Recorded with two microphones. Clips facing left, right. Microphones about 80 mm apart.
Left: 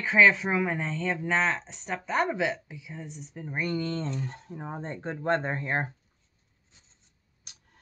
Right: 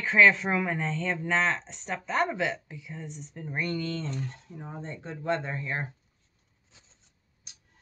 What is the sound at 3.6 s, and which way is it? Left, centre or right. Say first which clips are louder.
Speech: left 3 dB; left.